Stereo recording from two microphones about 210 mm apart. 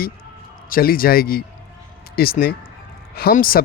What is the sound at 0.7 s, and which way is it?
Speech, 45° left (ahead or behind).